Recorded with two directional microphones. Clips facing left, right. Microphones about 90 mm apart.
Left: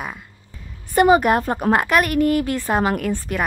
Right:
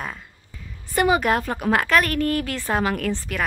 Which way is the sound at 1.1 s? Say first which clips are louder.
Left 4 dB; 20° left (ahead or behind).